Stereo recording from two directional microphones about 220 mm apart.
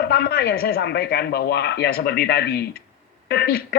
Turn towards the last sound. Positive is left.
turn(degrees=45)  # may be behind; listen again after turning